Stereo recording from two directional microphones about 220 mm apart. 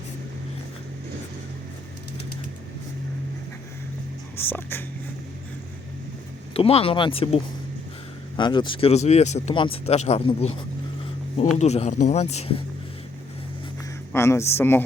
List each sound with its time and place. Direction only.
4.4 s speech: 10° left (ahead or behind)
6.5 s speech: 25° left (ahead or behind)
14.1 s speech: 15° left (ahead or behind)